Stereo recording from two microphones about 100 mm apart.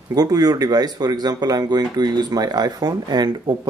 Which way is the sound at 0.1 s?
40° right (ahead or behind).